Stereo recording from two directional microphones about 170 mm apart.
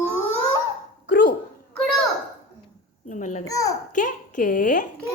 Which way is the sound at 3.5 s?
20° left (ahead or behind).